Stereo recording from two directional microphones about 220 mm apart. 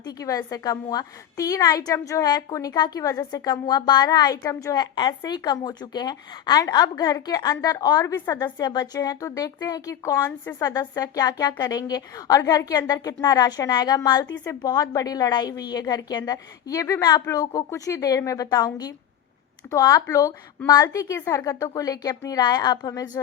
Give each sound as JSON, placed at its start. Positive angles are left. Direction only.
{"t": 0.0, "sound": "speech", "side_deg": 15}